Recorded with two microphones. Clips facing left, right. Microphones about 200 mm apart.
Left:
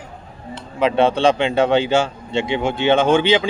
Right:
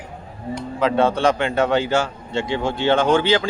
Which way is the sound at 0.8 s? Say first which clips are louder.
Left 2 dB; 25° left (ahead or behind).